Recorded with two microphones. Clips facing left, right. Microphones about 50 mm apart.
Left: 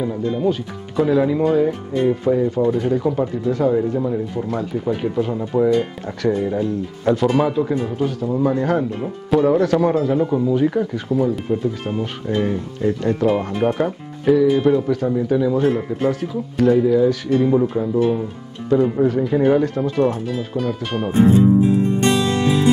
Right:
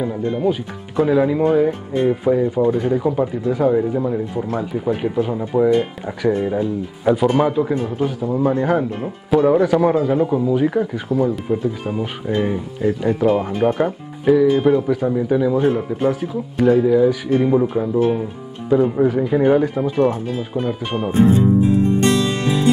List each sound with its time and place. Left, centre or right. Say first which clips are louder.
0.2 s speech: even; right
0.5 s speech: even; centre
22.0 s music: even; centre